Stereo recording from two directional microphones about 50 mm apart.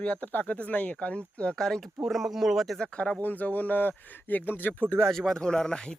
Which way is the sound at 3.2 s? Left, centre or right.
Left.